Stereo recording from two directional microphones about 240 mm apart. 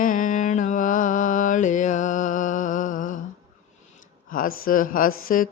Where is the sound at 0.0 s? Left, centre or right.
Left.